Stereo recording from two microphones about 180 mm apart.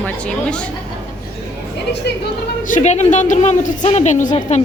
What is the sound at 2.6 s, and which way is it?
A woman's voice, 45° left (ahead or behind).